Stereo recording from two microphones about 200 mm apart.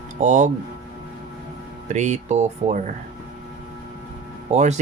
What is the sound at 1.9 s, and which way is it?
Speech, 35° right (ahead or behind).